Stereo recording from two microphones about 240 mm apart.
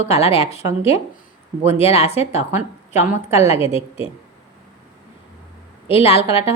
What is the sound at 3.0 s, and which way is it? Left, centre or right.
Speech, centre.